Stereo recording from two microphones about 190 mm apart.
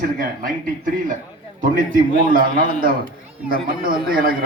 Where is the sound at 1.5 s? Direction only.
45° right (ahead or behind).